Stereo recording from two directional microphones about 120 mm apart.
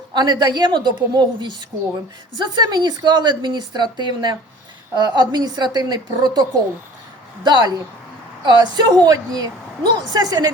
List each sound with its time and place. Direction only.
0.1 s a woman's voice: 35° right (ahead or behind)
7.4 s a woman's voice: 35° right (ahead or behind)